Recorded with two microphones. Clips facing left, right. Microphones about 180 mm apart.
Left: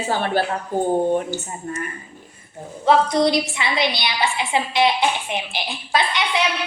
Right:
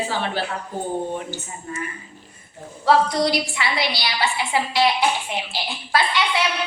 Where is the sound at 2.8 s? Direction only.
20° left (ahead or behind).